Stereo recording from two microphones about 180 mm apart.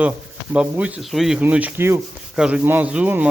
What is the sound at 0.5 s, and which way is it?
Rub, 5° right (ahead or behind).